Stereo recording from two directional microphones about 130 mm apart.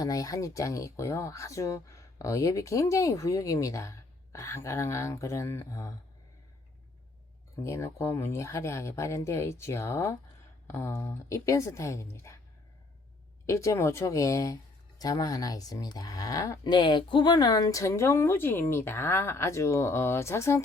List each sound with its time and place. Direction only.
0.0 s speech: 25° left (ahead or behind)
7.6 s speech: 20° left (ahead or behind)
13.4 s speech: 25° left (ahead or behind)